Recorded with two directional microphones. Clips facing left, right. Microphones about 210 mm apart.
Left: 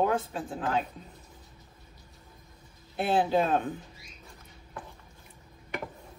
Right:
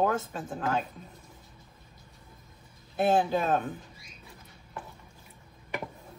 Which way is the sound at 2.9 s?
45° right (ahead or behind).